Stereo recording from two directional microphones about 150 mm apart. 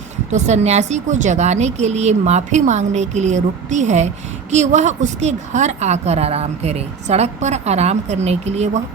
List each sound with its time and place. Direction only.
0.3 s a woman's voice: 50° right (ahead or behind)